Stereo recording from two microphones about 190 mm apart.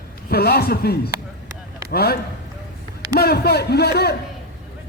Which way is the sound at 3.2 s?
55° left (ahead or behind).